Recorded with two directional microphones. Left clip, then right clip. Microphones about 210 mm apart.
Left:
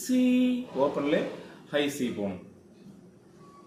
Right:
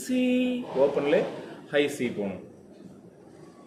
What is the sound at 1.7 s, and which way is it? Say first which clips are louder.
Speech: right 3 dB; 10° right (ahead or behind).